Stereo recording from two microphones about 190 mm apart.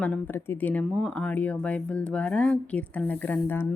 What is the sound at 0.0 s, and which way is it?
Speech, 10° left (ahead or behind).